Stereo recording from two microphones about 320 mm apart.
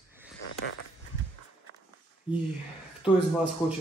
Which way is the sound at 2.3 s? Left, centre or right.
Centre.